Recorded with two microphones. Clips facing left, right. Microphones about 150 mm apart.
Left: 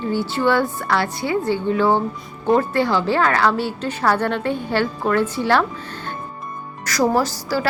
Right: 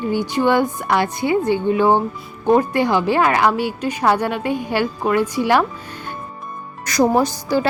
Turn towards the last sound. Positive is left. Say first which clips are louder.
# right 3 dB
turn(degrees=-20)  # may be behind; listen again after turning